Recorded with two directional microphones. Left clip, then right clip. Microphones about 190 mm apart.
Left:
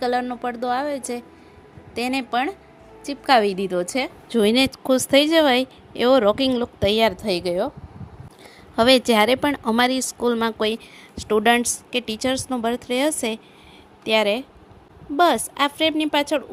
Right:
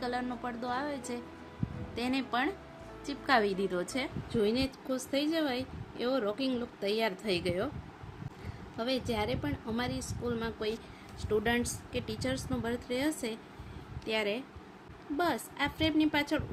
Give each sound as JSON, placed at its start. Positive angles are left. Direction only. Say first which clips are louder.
{"t": 0.0, "sound": "a woman's voice", "louder": "left 13 dB", "side_deg": 40}
{"t": 8.7, "sound": "a woman's voice", "louder": "left 18 dB", "side_deg": 55}